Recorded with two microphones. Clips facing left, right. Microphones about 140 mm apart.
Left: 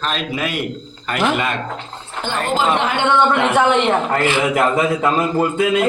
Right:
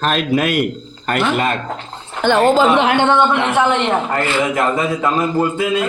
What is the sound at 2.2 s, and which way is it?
Speech, 75° right (ahead or behind).